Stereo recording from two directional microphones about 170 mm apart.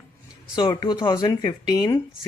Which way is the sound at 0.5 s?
25° left (ahead or behind).